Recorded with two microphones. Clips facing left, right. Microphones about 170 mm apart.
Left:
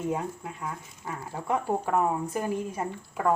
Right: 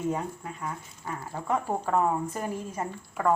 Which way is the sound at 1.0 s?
10° left (ahead or behind).